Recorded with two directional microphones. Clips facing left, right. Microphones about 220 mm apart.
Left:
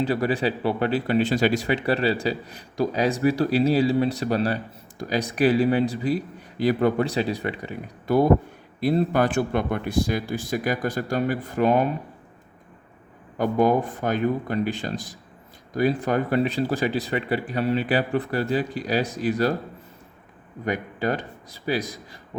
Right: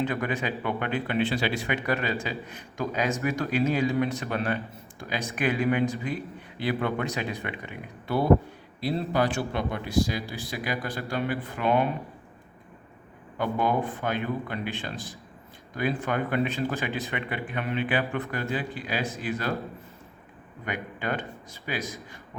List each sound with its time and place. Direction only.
0.0 s a man's voice: 35° left (ahead or behind)
13.4 s speech: 40° left (ahead or behind)
14.9 s speech: 15° left (ahead or behind)
15.7 s speech: 40° left (ahead or behind)
20.7 s speech: 40° left (ahead or behind)